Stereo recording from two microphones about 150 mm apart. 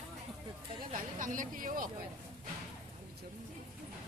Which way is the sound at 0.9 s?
60° right (ahead or behind).